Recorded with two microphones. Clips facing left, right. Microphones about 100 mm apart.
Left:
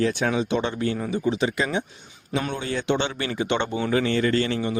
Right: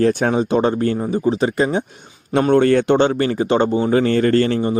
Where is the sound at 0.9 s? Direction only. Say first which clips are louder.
Right 6 dB; 35° right (ahead or behind).